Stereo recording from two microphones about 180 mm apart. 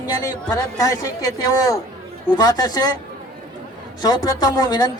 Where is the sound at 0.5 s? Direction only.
20° left (ahead or behind).